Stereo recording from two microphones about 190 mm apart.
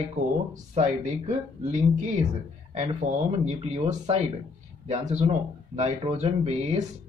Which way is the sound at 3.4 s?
35° right (ahead or behind).